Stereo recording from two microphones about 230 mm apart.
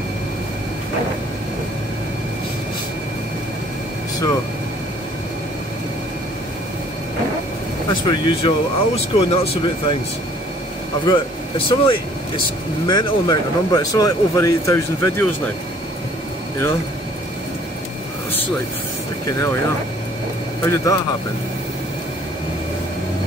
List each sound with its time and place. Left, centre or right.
7.9 s speech: left
11.1 s speech: left
19.3 s speech: centre
20.6 s speech: centre